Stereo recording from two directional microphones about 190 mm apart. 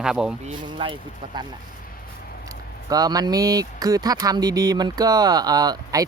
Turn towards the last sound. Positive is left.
turn(degrees=-20)  # may be behind; listen again after turning